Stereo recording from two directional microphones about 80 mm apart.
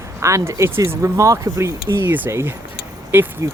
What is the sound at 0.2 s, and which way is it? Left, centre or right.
Speech, right.